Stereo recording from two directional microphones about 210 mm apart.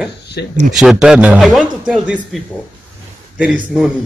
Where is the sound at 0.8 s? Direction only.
Centre (ahead or behind).